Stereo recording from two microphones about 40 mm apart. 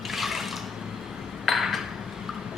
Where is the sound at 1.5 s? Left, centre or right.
Centre.